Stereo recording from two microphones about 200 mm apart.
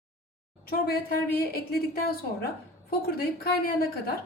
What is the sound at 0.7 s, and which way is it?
Speech, 45° left (ahead or behind).